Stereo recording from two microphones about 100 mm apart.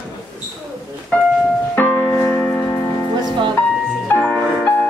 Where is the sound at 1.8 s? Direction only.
15° left (ahead or behind).